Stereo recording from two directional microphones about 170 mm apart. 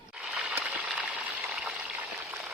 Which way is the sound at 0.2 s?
5° right (ahead or behind).